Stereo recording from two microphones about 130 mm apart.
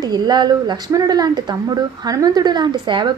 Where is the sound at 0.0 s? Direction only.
30° right (ahead or behind).